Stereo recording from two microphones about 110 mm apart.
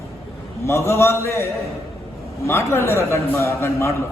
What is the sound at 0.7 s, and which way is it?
Speech, 25° left (ahead or behind).